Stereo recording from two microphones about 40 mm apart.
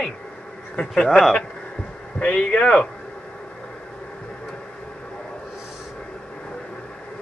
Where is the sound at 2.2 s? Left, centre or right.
Left.